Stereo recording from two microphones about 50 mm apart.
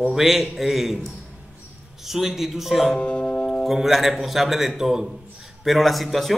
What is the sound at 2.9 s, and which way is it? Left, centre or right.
Music, left.